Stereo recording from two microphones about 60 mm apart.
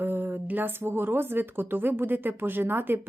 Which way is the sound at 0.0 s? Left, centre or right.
Right.